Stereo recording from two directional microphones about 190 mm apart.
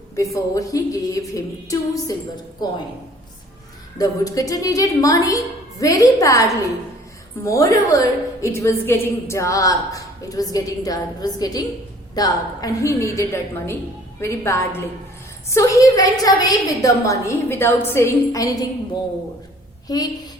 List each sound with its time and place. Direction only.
0.2 s a woman's voice: 15° left (ahead or behind)
3.9 s a woman's voice: 20° left (ahead or behind)
19.9 s a woman's voice: 20° left (ahead or behind)